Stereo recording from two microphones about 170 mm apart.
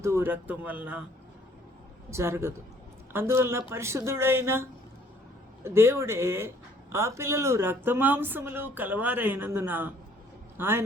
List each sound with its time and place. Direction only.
0.0 s speech: 15° right (ahead or behind)
2.0 s speech: 15° right (ahead or behind)